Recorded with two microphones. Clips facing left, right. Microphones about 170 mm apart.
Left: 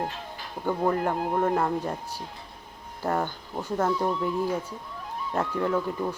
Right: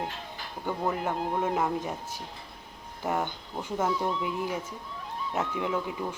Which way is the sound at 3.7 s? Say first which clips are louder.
Left 3 dB; 10° right (ahead or behind).